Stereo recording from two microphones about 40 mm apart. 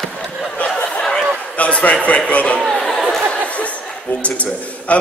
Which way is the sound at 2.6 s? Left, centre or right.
Centre.